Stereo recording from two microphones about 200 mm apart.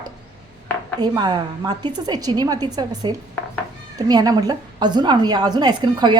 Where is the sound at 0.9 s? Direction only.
20° right (ahead or behind).